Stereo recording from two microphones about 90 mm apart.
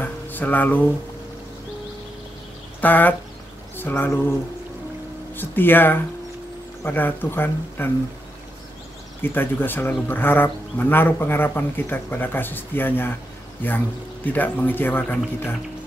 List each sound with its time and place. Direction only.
0.0 s a sound: 20° left (ahead or behind)
2.8 s speech: 20° left (ahead or behind)
5.3 s speech: 25° left (ahead or behind)
9.2 s speech: 25° left (ahead or behind)